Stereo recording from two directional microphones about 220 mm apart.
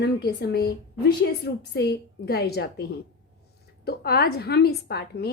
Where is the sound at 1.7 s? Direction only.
45° left (ahead or behind).